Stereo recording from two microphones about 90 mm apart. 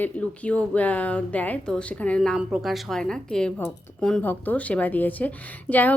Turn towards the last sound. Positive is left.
turn(degrees=20)  # may be behind; listen again after turning